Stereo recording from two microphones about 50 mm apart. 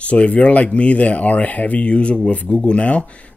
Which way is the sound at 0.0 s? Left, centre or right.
Left.